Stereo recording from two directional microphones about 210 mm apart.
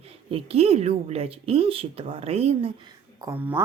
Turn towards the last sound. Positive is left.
turn(degrees=-10)  # may be behind; listen again after turning